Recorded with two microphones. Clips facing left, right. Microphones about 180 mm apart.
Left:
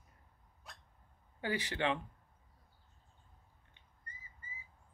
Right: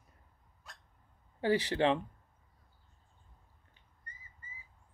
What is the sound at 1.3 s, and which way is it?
Speech, 35° right (ahead or behind).